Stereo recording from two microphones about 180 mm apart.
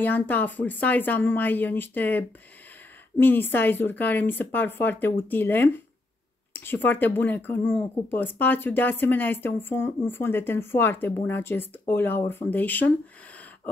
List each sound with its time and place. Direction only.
0.0 s speech: 10° left (ahead or behind)